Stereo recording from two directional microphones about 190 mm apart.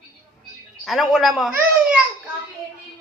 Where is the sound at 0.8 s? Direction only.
Centre (ahead or behind).